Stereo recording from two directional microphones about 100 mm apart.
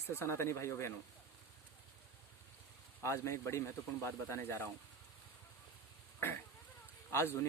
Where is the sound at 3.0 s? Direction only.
30° left (ahead or behind).